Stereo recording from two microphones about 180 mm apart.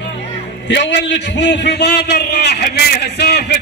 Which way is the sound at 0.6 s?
75° left (ahead or behind).